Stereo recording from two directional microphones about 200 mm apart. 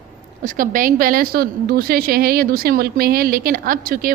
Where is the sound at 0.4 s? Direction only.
40° right (ahead or behind).